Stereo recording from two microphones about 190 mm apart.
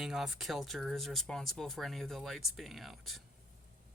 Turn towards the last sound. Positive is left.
turn(degrees=0)  # may be behind; listen again after turning